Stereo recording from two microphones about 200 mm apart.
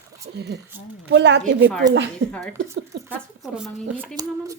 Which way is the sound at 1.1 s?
60° right (ahead or behind).